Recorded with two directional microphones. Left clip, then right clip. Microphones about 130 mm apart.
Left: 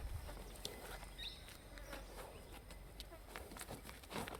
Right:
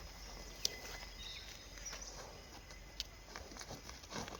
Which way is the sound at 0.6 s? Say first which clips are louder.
Right 9 dB; 5° right (ahead or behind).